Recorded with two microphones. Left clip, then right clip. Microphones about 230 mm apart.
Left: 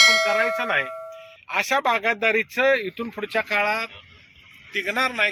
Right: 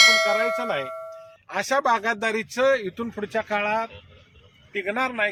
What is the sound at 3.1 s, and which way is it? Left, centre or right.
A man's voice, right.